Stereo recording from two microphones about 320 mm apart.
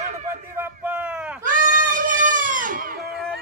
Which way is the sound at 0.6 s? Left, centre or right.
Centre.